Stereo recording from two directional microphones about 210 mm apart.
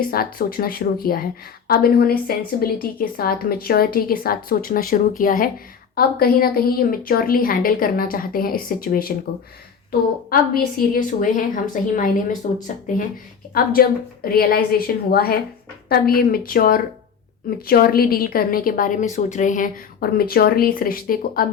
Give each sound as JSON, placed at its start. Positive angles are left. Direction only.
{"t": 0.1, "sound": "a woman's voice", "side_deg": 45}
{"t": 10.2, "sound": "a woman's voice", "side_deg": 45}
{"t": 13.5, "sound": "a woman's voice", "side_deg": 45}